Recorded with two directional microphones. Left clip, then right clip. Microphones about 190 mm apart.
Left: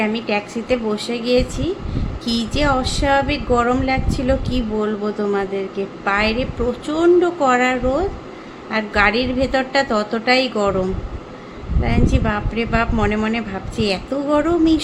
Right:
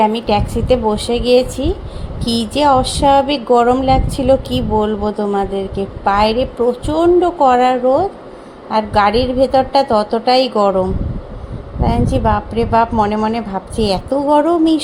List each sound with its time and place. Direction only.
0.0 s a woman's voice: 25° right (ahead or behind)